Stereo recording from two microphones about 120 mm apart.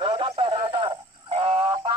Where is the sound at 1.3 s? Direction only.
45° right (ahead or behind).